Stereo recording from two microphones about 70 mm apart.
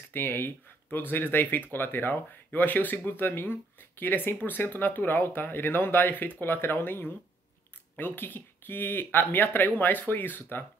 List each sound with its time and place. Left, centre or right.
0.1 s speech: left